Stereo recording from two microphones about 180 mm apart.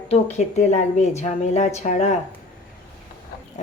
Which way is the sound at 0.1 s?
40° left (ahead or behind).